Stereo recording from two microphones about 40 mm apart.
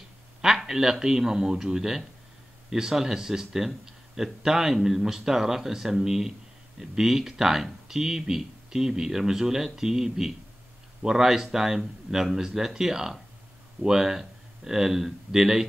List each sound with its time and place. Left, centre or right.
0.4 s speech: centre